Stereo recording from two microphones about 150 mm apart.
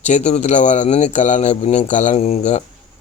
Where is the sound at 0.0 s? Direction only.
50° left (ahead or behind).